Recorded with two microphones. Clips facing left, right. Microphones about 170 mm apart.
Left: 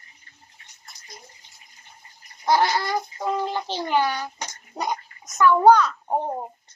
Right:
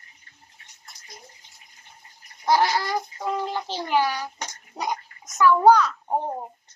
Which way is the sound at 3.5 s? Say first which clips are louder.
Left 1 dB; 5° right (ahead or behind).